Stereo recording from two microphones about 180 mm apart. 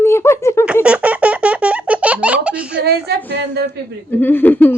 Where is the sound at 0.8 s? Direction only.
5° right (ahead or behind).